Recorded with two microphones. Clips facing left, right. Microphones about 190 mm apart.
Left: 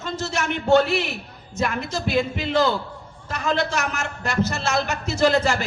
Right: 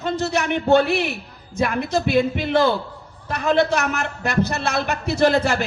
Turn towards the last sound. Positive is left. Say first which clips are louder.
# right 2 dB
turn(degrees=-55)  # may be behind; listen again after turning